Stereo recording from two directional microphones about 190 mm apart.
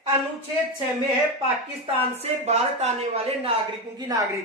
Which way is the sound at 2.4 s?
35° right (ahead or behind).